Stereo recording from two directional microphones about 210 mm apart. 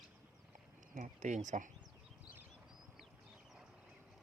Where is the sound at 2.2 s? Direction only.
10° right (ahead or behind).